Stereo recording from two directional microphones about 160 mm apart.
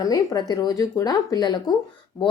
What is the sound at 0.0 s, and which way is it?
A woman's voice, 25° left (ahead or behind).